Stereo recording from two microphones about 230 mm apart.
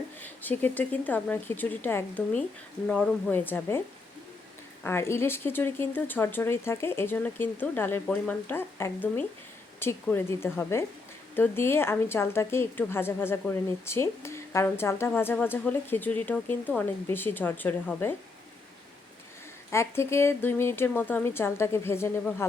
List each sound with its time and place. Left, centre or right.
0.2 s speech: centre
4.8 s speech: centre
19.7 s speech: centre